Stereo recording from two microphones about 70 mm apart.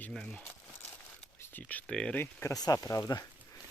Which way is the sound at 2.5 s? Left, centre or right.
Left.